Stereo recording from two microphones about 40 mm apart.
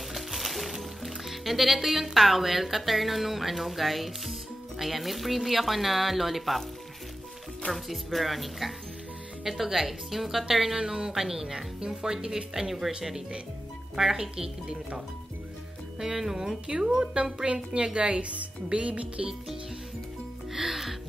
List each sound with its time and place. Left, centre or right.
0.1 s speech: centre
7.7 s speech: centre
16.0 s speech: centre; by 19.2 s right
20.5 s music: centre